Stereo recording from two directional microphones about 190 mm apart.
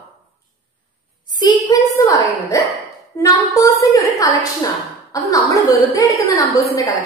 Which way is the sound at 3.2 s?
15° left (ahead or behind).